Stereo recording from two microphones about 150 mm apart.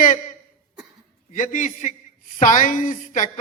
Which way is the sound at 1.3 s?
60° left (ahead or behind).